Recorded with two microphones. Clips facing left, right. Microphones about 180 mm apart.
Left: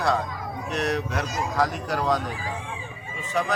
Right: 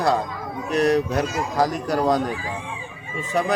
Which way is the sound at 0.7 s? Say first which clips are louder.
Right 8 dB; 35° right (ahead or behind).